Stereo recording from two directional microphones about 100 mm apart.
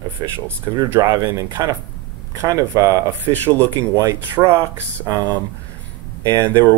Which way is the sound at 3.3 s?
15° left (ahead or behind).